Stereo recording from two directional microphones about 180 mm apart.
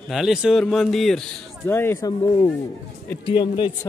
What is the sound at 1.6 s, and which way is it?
Speech, 15° left (ahead or behind).